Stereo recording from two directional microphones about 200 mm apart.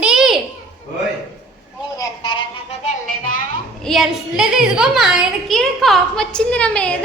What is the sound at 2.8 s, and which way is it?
Music, 40° left (ahead or behind).